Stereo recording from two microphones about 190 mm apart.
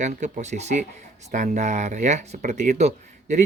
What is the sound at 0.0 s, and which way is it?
Speech, 40° right (ahead or behind).